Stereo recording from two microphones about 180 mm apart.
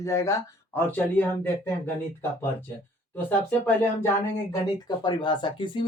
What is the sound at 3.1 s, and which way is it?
Speech, 10° left (ahead or behind).